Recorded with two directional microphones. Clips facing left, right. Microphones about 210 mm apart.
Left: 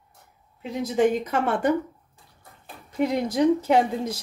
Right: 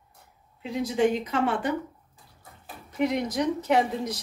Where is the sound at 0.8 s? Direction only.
50° left (ahead or behind).